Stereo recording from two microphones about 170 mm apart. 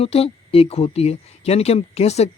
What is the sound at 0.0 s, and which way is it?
Speech, 35° left (ahead or behind).